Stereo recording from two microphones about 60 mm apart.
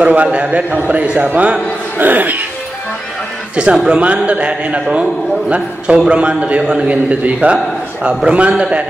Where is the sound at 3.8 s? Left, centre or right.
Centre.